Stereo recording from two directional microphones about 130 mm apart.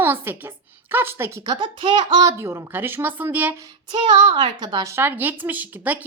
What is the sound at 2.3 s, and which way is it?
A woman's voice, 20° right (ahead or behind).